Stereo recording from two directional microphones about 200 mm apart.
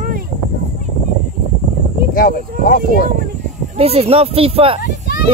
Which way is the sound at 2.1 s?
45° left (ahead or behind).